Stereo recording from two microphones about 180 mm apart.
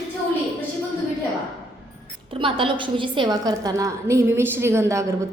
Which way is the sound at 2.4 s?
30° right (ahead or behind).